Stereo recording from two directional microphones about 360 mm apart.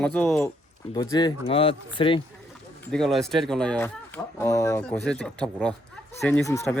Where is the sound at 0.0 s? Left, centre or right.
Centre.